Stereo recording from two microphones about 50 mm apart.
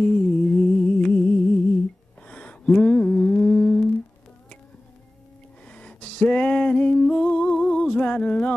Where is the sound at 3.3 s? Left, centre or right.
Left.